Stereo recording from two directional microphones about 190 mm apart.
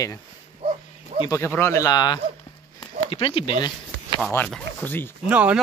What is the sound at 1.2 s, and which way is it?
Speech, 15° left (ahead or behind).